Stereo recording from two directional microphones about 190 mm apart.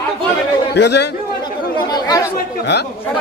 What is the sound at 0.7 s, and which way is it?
Speech, 60° left (ahead or behind).